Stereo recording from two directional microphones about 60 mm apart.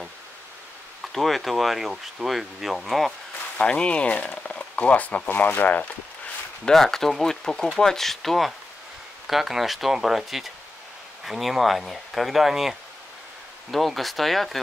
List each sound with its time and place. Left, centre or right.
1.1 s speech: centre
3.5 s speech: centre
6.6 s speech: centre